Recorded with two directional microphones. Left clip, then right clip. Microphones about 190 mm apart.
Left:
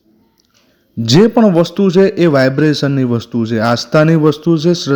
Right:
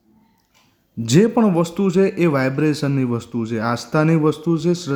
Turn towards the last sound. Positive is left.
turn(degrees=20)  # may be behind; listen again after turning